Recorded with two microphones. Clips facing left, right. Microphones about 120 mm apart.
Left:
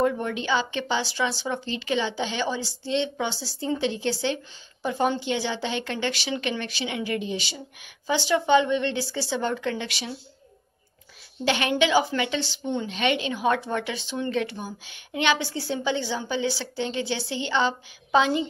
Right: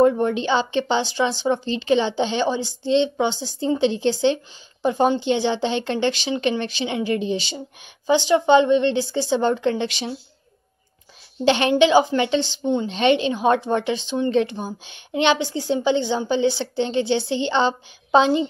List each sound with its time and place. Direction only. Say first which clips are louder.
0.0 s a woman's voice: right 7 dB; 30° right (ahead or behind)
11.4 s a woman's voice: right 7 dB; 25° right (ahead or behind)